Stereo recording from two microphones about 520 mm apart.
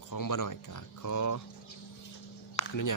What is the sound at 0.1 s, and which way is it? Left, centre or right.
Speech, left.